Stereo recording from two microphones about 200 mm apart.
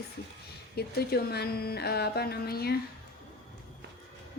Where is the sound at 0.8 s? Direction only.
50° left (ahead or behind).